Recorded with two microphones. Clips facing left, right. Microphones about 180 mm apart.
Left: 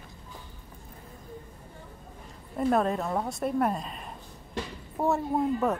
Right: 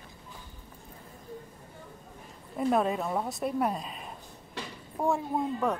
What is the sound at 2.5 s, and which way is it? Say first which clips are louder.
A woman's voice: left 1 dB; centre (ahead or behind).